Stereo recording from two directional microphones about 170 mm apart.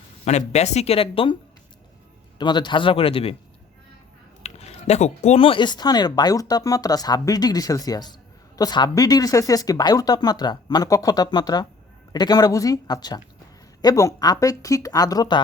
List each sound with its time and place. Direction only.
0.3 s speech: 40° left (ahead or behind)
2.4 s speech: 25° left (ahead or behind)
4.4 s speech: 40° left (ahead or behind); by 15.4 s 20° left (ahead or behind)